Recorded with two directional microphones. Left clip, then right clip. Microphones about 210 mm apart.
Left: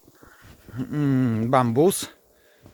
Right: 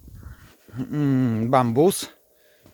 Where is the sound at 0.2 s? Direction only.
Centre (ahead or behind).